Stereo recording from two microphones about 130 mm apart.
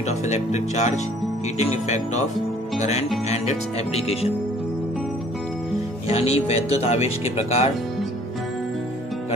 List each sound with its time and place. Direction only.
0.0 s speech: 60° left (ahead or behind)
6.0 s speech: 50° left (ahead or behind)